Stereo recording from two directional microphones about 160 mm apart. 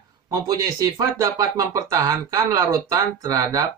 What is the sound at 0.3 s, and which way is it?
Speech, 25° right (ahead or behind).